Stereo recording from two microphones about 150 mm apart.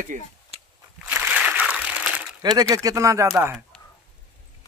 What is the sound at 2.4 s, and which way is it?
Speech, 25° right (ahead or behind).